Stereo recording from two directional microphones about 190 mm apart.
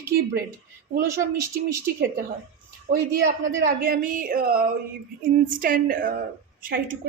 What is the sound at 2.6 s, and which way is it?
A woman's voice, 50° right (ahead or behind).